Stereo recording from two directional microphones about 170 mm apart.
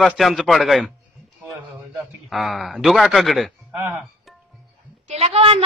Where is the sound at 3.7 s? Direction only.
10° right (ahead or behind).